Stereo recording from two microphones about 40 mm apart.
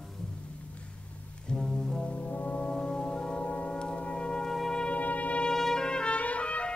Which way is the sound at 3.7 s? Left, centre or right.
Left.